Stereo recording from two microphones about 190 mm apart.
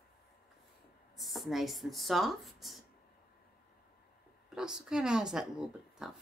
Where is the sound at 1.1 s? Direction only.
Centre (ahead or behind).